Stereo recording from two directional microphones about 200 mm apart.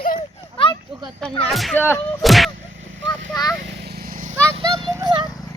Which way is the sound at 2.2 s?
Centre (ahead or behind).